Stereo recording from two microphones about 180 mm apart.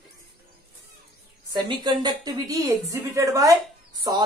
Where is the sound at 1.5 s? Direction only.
25° right (ahead or behind).